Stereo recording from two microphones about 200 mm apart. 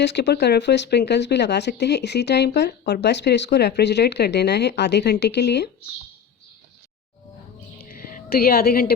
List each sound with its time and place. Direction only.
0.0 s speech: 60° left (ahead or behind)
7.8 s music: 45° left (ahead or behind)